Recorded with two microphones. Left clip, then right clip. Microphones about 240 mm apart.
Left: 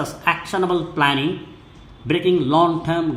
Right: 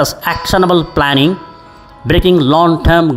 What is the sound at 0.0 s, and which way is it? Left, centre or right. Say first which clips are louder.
Speech: right 7 dB; right.